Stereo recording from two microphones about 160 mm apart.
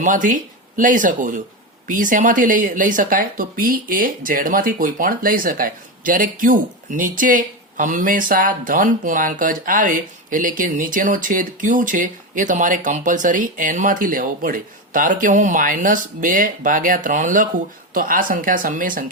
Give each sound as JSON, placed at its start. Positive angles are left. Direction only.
{"t": 0.0, "sound": "speech", "side_deg": -55}